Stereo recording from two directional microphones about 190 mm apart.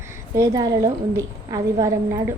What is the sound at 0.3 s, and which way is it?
A woman's voice, 15° right (ahead or behind).